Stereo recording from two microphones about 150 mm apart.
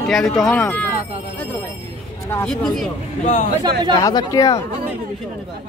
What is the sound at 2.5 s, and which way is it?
Speech, 5° left (ahead or behind).